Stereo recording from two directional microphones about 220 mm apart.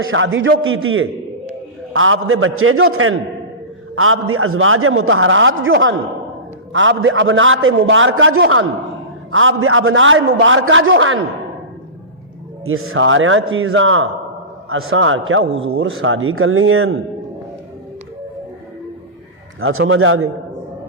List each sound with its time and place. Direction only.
0.0 s a man's voice: 65° right (ahead or behind)
12.6 s a man's voice: 70° right (ahead or behind)
19.5 s a man's voice: 70° right (ahead or behind)